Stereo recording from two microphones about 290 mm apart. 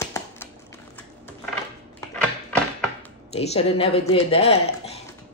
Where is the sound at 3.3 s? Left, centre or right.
Left.